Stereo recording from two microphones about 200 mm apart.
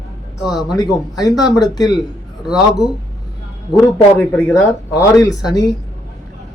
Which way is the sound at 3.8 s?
15° left (ahead or behind).